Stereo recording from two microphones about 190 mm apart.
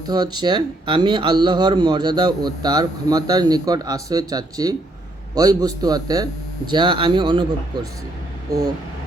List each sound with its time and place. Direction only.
0.1 s speech: 20° right (ahead or behind)